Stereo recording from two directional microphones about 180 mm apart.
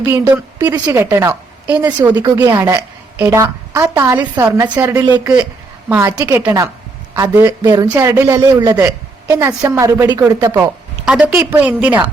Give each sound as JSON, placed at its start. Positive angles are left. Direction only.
{"t": 0.1, "sound": "a woman's voice", "side_deg": -15}
{"t": 5.2, "sound": "a man's voice", "side_deg": -5}
{"t": 11.0, "sound": "a woman's voice", "side_deg": -5}